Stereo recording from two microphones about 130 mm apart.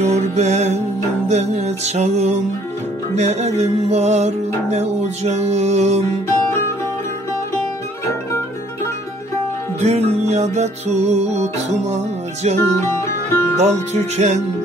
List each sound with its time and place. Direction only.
0.0 s music: 60° right (ahead or behind)
9.8 s music: 55° right (ahead or behind)
12.5 s music: 15° left (ahead or behind)
13.6 s music: 60° right (ahead or behind)